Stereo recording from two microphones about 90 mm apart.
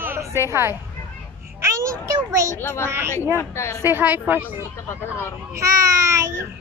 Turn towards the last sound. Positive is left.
turn(degrees=-35)  # may be behind; listen again after turning